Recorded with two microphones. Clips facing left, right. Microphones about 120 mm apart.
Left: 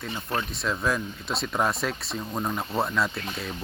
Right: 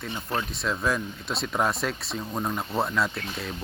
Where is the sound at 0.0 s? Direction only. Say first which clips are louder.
Even; centre (ahead or behind).